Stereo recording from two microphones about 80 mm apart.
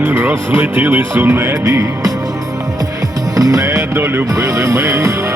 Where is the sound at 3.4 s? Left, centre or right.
Right.